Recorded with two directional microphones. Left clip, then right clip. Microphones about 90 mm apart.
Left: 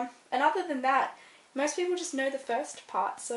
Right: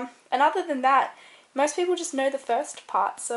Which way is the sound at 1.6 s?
35° right (ahead or behind).